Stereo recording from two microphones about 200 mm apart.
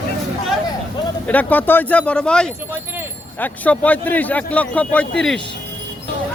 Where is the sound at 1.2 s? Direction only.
10° left (ahead or behind).